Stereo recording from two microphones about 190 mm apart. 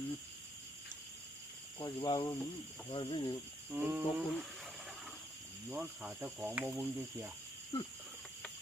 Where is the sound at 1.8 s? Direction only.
25° left (ahead or behind).